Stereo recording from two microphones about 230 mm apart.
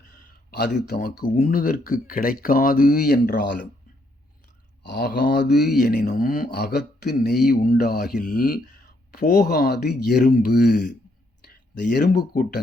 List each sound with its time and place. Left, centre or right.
0.9 s speech: left
4.8 s speech: left